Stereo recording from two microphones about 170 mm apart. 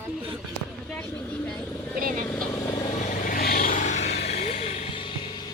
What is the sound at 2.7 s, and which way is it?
Vehicle, 50° left (ahead or behind).